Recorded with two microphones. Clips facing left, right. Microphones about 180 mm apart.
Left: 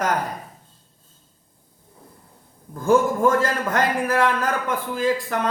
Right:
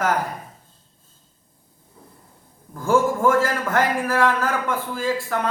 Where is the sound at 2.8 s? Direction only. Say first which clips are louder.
Left 1 dB; 20° left (ahead or behind).